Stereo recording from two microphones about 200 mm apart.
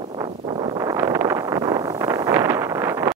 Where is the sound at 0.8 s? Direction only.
15° right (ahead or behind).